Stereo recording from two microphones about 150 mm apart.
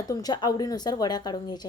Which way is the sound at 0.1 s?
25° left (ahead or behind).